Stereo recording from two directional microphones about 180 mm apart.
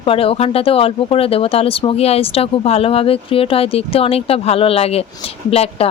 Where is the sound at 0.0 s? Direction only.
30° left (ahead or behind).